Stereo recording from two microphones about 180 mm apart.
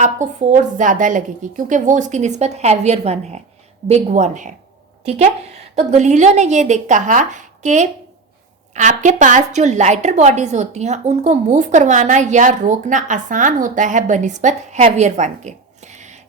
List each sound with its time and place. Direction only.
0.0 s a woman's voice: 40° right (ahead or behind)